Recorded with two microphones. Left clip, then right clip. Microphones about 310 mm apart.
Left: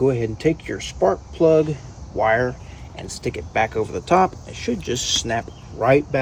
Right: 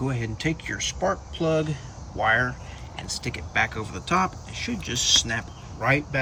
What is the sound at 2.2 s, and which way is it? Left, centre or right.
Speech, centre.